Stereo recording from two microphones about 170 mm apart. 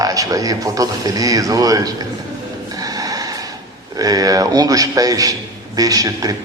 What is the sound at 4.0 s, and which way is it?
Speech, 20° right (ahead or behind).